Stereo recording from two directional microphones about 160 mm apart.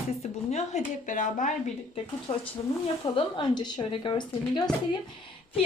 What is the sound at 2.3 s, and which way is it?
A woman's voice, 40° left (ahead or behind).